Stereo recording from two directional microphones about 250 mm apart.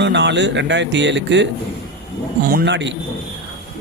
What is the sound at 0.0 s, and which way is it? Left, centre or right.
Speech, right.